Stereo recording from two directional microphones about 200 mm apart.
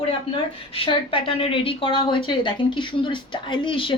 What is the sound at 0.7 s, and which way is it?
A woman's voice, 25° left (ahead or behind).